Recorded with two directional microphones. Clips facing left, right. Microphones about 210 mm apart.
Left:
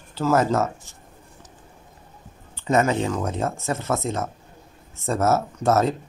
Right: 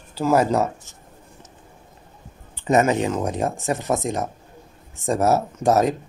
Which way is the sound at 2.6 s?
20° right (ahead or behind).